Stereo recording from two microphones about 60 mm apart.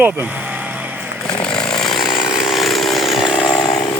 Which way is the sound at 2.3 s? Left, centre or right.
Centre.